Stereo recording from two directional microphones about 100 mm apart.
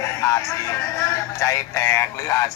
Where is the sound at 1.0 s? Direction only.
30° left (ahead or behind).